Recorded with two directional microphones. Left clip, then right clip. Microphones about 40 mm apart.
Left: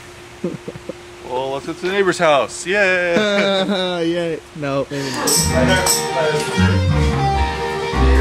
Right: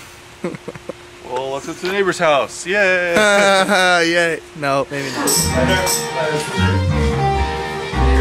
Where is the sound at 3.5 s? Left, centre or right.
Right.